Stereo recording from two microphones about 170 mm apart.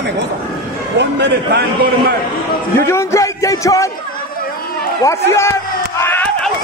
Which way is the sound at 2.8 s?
15° left (ahead or behind).